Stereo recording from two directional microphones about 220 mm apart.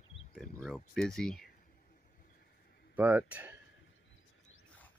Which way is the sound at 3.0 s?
10° right (ahead or behind).